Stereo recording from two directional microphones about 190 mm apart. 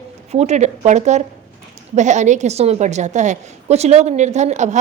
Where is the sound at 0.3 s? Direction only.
35° right (ahead or behind).